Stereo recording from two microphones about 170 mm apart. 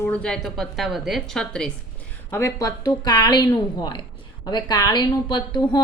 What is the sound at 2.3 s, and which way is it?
A woman's voice, 15° left (ahead or behind).